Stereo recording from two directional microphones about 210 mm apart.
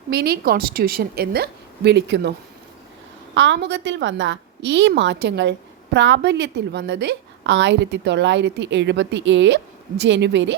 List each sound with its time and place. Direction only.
0.1 s a woman's voice: 50° right (ahead or behind)
3.3 s a woman's voice: 60° right (ahead or behind)